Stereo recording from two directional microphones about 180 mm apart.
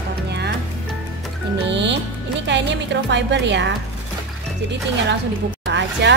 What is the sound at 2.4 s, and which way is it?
A woman's voice, 80° right.